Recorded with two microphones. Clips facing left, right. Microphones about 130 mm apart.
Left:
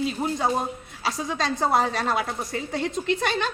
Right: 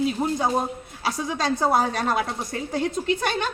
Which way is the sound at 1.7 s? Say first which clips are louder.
Right 1 dB; 45° right (ahead or behind).